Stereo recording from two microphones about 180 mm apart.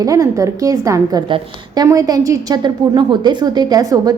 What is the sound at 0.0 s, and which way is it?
A woman's voice, 20° right (ahead or behind).